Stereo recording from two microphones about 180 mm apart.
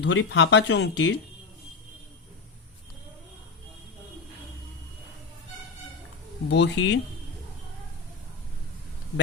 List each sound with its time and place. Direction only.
0.0 s speech: 75° left (ahead or behind)
6.5 s speech: 70° left (ahead or behind)